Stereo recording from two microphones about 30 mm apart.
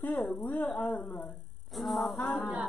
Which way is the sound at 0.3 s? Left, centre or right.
Left.